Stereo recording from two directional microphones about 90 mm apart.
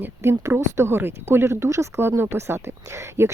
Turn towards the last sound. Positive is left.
turn(degrees=-30)  # may be behind; listen again after turning